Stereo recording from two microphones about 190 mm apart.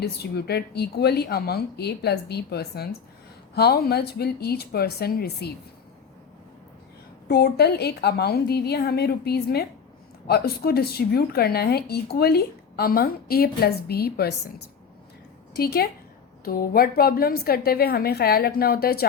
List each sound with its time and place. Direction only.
0.0 s speech: 60° left (ahead or behind)
7.3 s speech: 55° left (ahead or behind)
15.5 s a woman's voice: 55° left (ahead or behind)